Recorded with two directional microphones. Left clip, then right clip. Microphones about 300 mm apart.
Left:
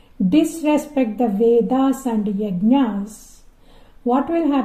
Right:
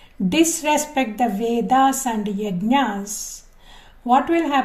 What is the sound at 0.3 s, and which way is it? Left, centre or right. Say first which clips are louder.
Speech: left 1 dB; right.